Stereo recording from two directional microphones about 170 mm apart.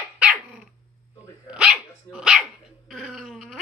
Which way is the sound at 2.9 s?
Centre (ahead or behind).